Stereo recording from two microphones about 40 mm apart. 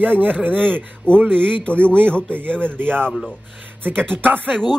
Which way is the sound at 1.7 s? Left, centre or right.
Right.